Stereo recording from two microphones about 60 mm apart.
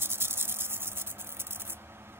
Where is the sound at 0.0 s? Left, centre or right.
Right.